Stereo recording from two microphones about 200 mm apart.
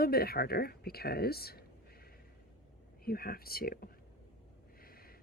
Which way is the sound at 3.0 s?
50° left (ahead or behind).